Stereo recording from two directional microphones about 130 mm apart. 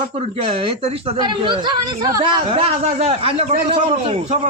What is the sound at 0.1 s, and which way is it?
A man's voice, 50° right (ahead or behind).